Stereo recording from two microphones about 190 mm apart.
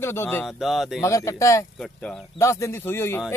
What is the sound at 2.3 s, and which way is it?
Speech, 15° left (ahead or behind).